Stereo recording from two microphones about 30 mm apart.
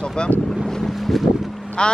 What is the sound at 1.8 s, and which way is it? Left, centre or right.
Speech, left.